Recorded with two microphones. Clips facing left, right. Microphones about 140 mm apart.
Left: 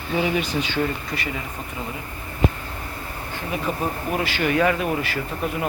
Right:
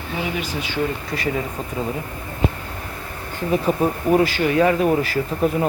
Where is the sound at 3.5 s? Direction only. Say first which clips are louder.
Right 7 dB; 35° right (ahead or behind).